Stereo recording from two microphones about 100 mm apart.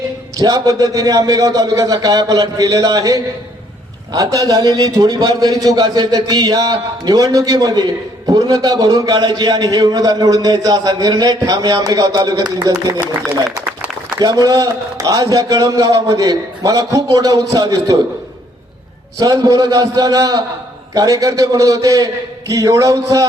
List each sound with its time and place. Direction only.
0.3 s a man's voice: 40° right (ahead or behind)
13.2 s a man's voice: 15° right (ahead or behind)
14.2 s a man's voice: 40° right (ahead or behind)
19.2 s a man's voice: 35° right (ahead or behind)